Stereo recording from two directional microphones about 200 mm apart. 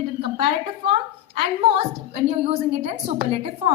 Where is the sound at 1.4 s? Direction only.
30° right (ahead or behind).